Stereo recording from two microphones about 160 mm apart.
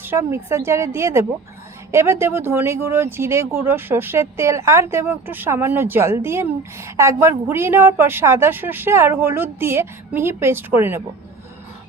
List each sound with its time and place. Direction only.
0.0 s speech: 15° right (ahead or behind)